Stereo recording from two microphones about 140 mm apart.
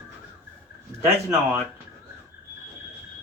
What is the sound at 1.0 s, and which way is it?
Speech, 15° right (ahead or behind).